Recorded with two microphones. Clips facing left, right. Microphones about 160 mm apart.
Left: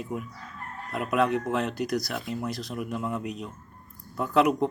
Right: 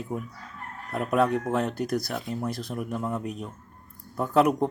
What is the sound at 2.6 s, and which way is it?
Speech, 55° right (ahead or behind).